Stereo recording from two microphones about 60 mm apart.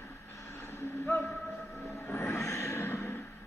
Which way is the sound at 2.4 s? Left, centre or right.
Left.